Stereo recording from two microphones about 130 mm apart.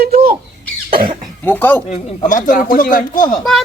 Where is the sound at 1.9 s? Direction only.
90° left.